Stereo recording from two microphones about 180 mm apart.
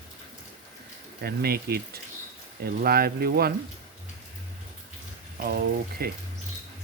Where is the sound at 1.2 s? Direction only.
60° right (ahead or behind).